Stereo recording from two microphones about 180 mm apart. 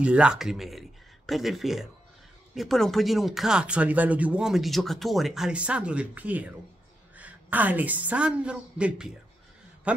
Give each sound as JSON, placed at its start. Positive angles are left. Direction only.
{"t": 0.0, "sound": "a woman's voice", "side_deg": -5}